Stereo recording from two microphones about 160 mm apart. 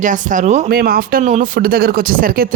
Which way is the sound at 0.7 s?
70° right (ahead or behind).